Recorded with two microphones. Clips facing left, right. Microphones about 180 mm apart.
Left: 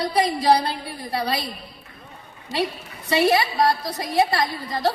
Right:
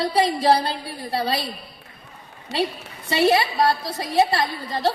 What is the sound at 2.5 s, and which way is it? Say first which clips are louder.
Speech: right 1 dB; 70° right (ahead or behind).